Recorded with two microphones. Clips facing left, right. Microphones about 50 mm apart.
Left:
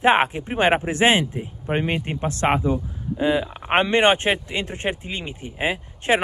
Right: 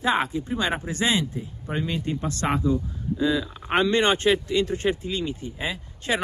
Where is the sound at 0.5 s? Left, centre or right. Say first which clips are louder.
Left 8 dB; left.